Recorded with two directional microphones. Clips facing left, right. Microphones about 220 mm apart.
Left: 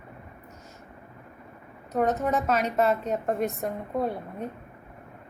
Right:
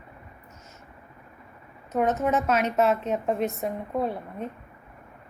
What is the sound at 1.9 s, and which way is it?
A woman's voice, centre (ahead or behind).